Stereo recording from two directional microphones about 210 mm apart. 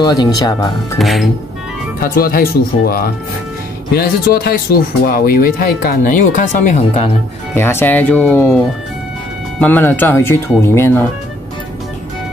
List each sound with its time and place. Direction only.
0.0 s speech: 20° left (ahead or behind)
0.9 s speech: centre (ahead or behind)
2.0 s speech: 45° left (ahead or behind)
7.5 s speech: 10° left (ahead or behind)
9.6 s speech: 10° left (ahead or behind)